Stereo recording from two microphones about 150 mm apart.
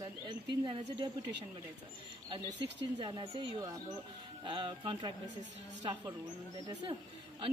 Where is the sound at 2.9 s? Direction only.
25° right (ahead or behind).